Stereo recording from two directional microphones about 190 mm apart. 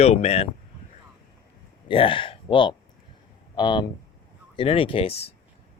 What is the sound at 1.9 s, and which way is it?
Speech, 25° left (ahead or behind).